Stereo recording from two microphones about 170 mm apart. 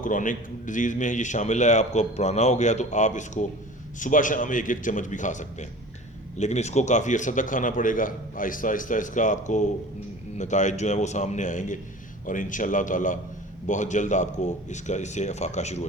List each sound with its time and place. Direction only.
0.0 s a man's voice: 50° left (ahead or behind)